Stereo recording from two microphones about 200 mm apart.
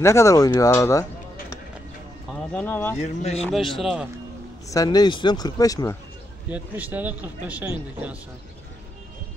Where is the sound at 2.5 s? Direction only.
10° left (ahead or behind).